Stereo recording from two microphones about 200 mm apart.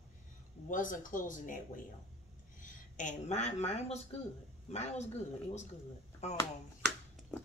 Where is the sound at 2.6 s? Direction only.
40° left (ahead or behind).